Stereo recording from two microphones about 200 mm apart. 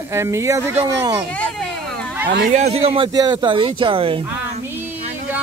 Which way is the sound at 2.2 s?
50° right (ahead or behind).